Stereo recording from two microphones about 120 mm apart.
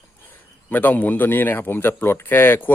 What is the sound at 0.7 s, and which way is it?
Speech, 15° left (ahead or behind).